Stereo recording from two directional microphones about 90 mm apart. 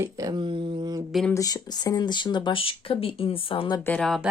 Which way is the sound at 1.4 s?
45° left (ahead or behind).